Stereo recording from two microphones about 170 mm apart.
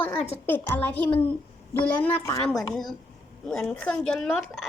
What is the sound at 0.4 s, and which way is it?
Speech, 10° left (ahead or behind).